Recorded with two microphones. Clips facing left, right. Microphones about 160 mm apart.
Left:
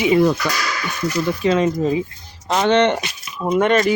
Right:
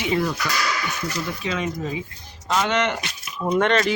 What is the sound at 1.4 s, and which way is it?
Speech, 35° left (ahead or behind).